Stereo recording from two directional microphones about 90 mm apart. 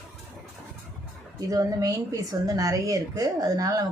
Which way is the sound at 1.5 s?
40° right (ahead or behind).